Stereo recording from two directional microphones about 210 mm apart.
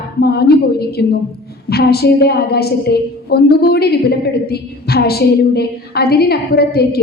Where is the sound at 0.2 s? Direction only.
50° left (ahead or behind).